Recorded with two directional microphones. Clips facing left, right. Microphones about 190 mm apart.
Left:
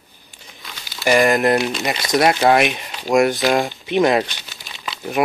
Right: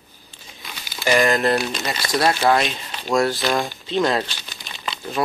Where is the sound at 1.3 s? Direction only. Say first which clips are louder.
Left 3 dB; 15° left (ahead or behind).